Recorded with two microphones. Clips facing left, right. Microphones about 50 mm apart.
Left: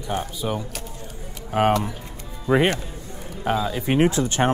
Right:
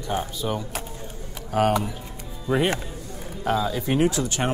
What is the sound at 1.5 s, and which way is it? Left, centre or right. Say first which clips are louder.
Speech: left 2 dB; left.